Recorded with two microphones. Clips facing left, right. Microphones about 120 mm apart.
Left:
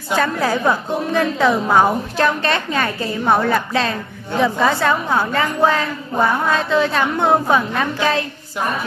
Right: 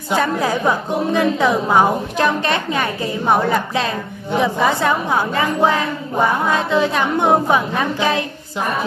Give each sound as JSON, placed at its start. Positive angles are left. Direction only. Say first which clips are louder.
{"t": 0.1, "sound": "a woman's voice", "louder": "even", "side_deg": -15}